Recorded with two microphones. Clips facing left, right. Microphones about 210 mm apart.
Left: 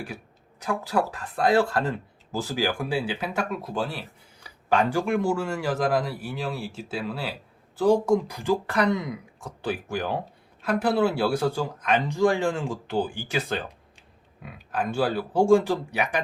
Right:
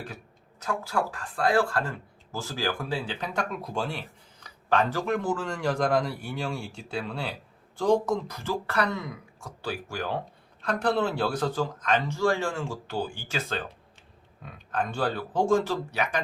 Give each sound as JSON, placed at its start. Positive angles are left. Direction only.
{"t": 0.6, "sound": "speech", "side_deg": 15}
{"t": 10.6, "sound": "speech", "side_deg": 5}